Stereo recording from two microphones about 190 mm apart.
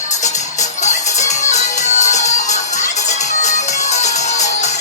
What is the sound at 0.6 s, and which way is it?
Music, 35° left (ahead or behind).